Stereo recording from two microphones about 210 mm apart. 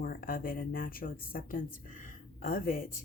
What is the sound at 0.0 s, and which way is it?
Speech, 40° left (ahead or behind).